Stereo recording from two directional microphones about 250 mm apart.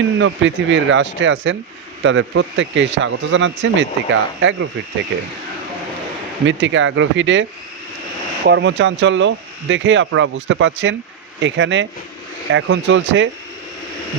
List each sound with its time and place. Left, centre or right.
0.2 s speech: right
6.4 s speech: right
8.4 s speech: right